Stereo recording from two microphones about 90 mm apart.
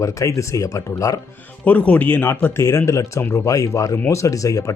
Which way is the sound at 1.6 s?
20° left (ahead or behind).